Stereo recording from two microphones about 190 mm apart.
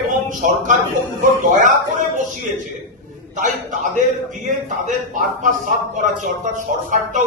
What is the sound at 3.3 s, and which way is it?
Speech, 40° right (ahead or behind).